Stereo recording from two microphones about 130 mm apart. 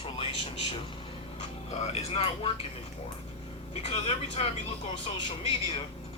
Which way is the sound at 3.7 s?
50° left (ahead or behind).